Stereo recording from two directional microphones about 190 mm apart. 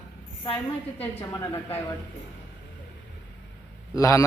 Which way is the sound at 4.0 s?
15° left (ahead or behind).